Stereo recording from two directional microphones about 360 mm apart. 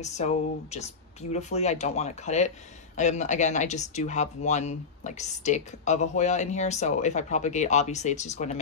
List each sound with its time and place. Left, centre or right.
0.0 s speech: centre